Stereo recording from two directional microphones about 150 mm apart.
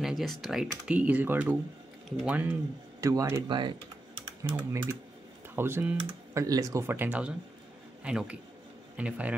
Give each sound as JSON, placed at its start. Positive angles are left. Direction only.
{"t": 0.0, "sound": "speech", "side_deg": 0}
{"t": 3.0, "sound": "speech", "side_deg": -20}
{"t": 5.6, "sound": "a man's voice", "side_deg": -15}